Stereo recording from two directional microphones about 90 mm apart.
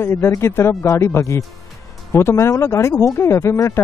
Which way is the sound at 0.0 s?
30° left (ahead or behind).